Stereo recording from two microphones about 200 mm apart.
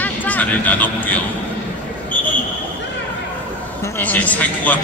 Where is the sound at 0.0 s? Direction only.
10° left (ahead or behind).